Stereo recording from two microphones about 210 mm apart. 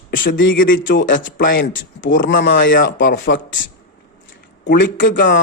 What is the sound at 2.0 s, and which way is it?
Speech, 40° left (ahead or behind).